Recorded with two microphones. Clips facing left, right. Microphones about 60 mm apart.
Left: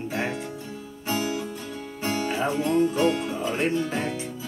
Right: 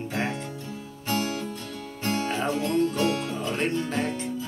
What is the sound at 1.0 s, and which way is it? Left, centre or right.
Music, centre.